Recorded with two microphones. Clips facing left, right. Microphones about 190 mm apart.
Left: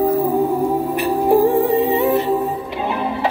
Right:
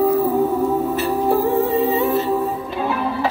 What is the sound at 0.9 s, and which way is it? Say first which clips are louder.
Music: left 3 dB; 15° left (ahead or behind).